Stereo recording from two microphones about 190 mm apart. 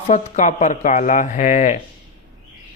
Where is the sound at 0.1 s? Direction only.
40° left (ahead or behind).